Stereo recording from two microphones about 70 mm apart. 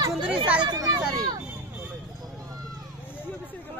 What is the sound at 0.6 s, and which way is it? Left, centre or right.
Speech, right.